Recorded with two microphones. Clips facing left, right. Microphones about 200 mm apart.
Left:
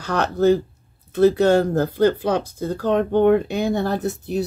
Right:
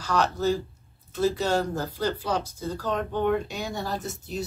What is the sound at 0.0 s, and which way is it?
Speech, 60° left (ahead or behind).